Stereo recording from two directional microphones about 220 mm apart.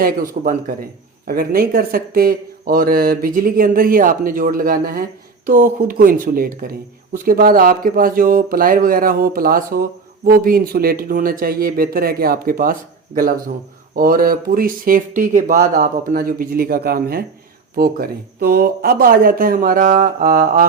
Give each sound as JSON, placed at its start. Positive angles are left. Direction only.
{"t": 0.0, "sound": "speech", "side_deg": -40}